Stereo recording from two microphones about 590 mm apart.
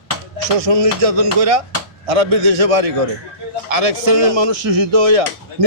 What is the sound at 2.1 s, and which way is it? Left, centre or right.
A man's voice, right.